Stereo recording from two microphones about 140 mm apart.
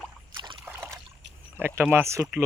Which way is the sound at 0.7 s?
20° right (ahead or behind).